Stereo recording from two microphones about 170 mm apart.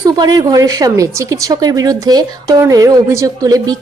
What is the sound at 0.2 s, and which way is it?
Speech, 20° right (ahead or behind).